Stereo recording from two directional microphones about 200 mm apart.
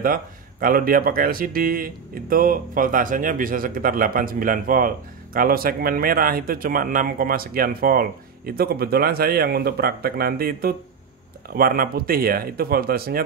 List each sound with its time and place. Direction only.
0.0 s speech: 45° right (ahead or behind)